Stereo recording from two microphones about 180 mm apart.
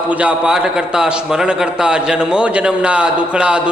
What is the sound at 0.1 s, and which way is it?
A man's voice, 10° right (ahead or behind).